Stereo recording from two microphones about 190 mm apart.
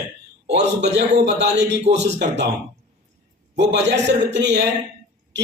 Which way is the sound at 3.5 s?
65° right (ahead or behind).